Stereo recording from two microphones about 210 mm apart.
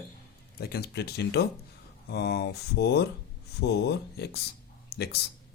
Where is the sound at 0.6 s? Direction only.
50° left (ahead or behind).